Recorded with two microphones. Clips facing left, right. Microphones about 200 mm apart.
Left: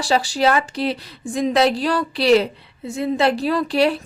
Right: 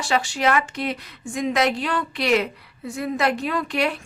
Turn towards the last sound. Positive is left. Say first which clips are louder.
# left 6 dB
turn(degrees=35)  # may be behind; listen again after turning